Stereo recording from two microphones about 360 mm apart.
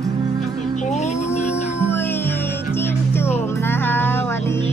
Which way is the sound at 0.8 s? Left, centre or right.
Centre.